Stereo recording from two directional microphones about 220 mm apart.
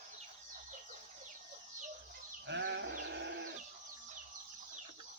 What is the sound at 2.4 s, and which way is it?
Goat, 50° right (ahead or behind).